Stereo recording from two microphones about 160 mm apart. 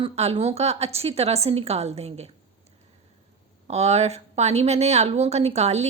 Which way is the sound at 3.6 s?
40° right (ahead or behind).